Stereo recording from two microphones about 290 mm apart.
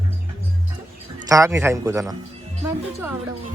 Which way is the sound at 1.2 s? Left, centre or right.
Centre.